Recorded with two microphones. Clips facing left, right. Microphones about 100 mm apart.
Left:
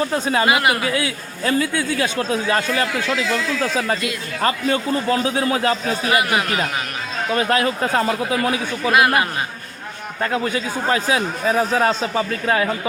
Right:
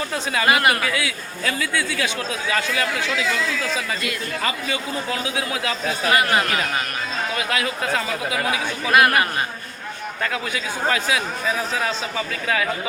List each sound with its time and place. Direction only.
0.1 s a man's voice: 30° left (ahead or behind)
0.4 s speech: 20° left (ahead or behind)
0.9 s a man's voice: 35° left (ahead or behind)
6.1 s speech: 20° left (ahead or behind)
7.3 s a man's voice: 35° left (ahead or behind)
8.9 s speech: 20° left (ahead or behind)
10.3 s a man's voice: 35° left (ahead or behind)